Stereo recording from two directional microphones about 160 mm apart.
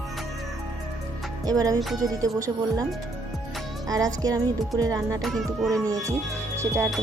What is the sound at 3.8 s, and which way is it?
Speech, 25° right (ahead or behind).